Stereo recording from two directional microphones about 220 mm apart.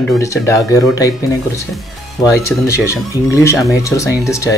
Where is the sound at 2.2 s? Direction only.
15° left (ahead or behind).